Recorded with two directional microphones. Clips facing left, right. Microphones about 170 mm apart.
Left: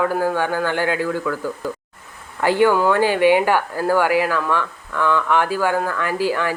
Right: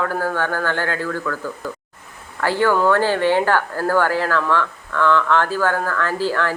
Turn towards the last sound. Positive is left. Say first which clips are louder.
# left 1 dB
turn(degrees=15)  # may be behind; listen again after turning